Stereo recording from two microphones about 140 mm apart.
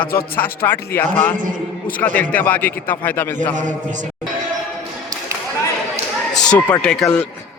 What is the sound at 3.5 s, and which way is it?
Speech, 65° right (ahead or behind).